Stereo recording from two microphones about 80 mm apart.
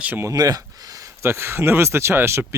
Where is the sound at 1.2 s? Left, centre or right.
Right.